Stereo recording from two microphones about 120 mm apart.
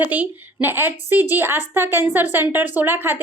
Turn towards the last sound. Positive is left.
turn(degrees=-20)  # may be behind; listen again after turning